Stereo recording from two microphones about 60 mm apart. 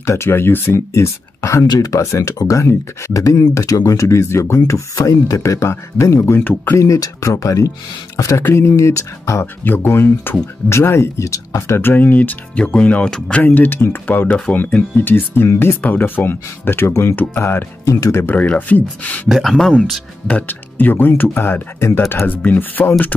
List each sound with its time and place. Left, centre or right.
0.0 s speech: left
6.4 s speech: left
6.8 s speech: left
8.4 s speech: left
9.7 s speech: left
11.2 s speech: left
11.8 s speech: left
19.2 s speech: centre
20.2 s speech: left